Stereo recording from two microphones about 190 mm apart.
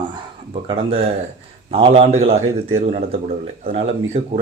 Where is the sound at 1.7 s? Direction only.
30° right (ahead or behind).